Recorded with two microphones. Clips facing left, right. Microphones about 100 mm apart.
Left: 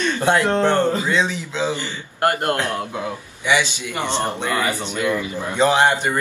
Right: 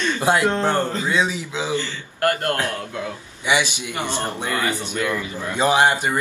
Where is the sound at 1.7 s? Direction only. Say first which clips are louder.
Right 1 dB; 20° left (ahead or behind).